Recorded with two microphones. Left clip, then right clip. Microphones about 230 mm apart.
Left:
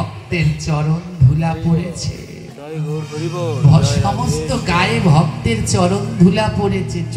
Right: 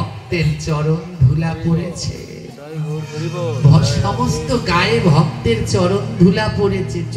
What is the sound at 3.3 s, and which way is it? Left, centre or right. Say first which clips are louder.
Speech: even; left.